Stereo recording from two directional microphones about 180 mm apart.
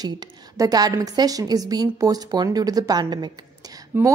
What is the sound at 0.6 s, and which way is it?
A woman's voice, 20° right (ahead or behind).